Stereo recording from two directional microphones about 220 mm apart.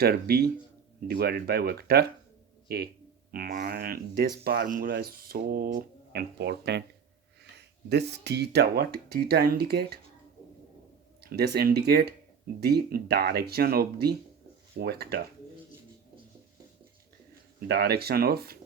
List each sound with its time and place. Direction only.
0.0 s speech: 45° right (ahead or behind)
7.9 s speech: 50° right (ahead or behind)
11.2 s speech: 45° right (ahead or behind)
17.7 s speech: 45° right (ahead or behind)